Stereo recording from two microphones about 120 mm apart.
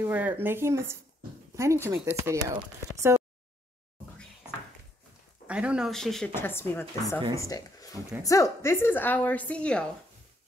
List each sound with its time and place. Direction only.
0.0 s speech: 15° right (ahead or behind)
3.0 s a sound: 25° right (ahead or behind)
5.5 s speech: 10° right (ahead or behind)
5.9 s speech: 5° left (ahead or behind)
6.3 s a woman's voice: 20° left (ahead or behind)